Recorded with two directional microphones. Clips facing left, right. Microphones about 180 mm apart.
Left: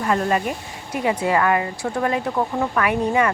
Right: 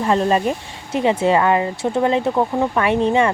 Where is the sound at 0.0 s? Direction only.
25° right (ahead or behind).